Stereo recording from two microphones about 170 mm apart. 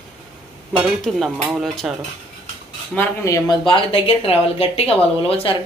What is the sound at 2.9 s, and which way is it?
Speech, 15° left (ahead or behind).